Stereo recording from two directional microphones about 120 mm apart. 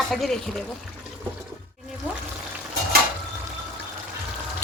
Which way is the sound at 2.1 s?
15° right (ahead or behind).